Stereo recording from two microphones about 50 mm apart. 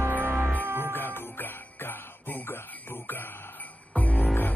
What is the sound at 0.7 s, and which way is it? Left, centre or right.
Music, right.